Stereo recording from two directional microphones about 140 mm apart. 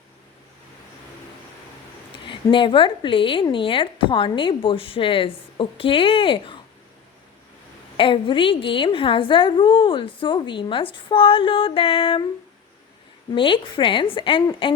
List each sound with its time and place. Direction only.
2.2 s a woman's voice: 35° left (ahead or behind)
7.9 s a woman's voice: 40° left (ahead or behind)
13.3 s a woman's voice: 35° left (ahead or behind)